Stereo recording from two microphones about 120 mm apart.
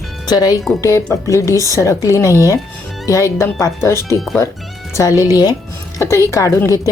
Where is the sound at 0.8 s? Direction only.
25° left (ahead or behind).